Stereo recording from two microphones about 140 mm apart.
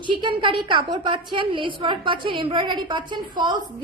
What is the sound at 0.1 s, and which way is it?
A woman's voice, 35° right (ahead or behind).